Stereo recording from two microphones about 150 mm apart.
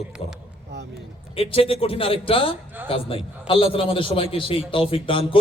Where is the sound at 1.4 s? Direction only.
40° left (ahead or behind).